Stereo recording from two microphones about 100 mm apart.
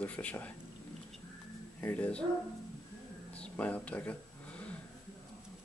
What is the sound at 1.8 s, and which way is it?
Speech, 15° left (ahead or behind).